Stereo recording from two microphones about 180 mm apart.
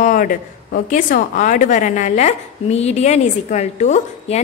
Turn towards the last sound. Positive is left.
turn(degrees=40)  # may be behind; listen again after turning